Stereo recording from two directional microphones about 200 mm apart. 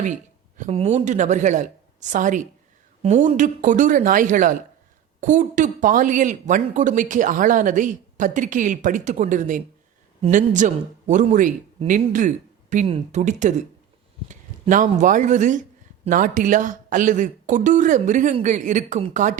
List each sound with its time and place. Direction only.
0.0 s speech: 40° right (ahead or behind)